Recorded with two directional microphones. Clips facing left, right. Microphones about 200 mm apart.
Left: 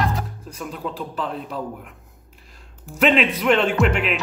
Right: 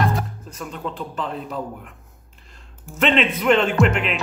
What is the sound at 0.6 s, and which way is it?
Speech, 5° left (ahead or behind).